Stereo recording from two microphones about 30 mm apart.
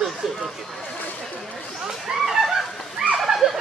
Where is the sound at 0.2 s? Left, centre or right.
Centre.